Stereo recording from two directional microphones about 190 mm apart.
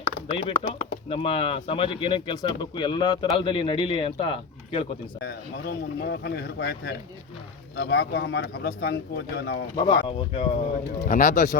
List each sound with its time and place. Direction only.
0.3 s speech: 30° left (ahead or behind)
5.2 s speech: 55° left (ahead or behind)
9.7 s speech: 25° left (ahead or behind)
11.0 s speech: 40° left (ahead or behind)